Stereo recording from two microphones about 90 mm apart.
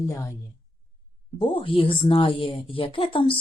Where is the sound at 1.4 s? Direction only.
80° left.